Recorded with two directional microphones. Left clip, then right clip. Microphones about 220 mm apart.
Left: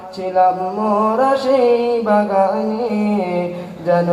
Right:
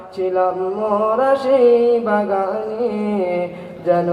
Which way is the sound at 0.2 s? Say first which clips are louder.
Right 3 dB; 40° right (ahead or behind).